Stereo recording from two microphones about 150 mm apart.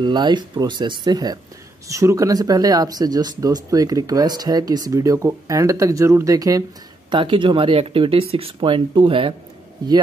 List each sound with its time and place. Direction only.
0.0 s speech: 30° right (ahead or behind)
7.1 s speech: 35° right (ahead or behind)